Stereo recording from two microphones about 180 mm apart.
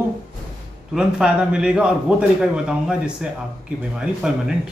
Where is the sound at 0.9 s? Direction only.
5° right (ahead or behind).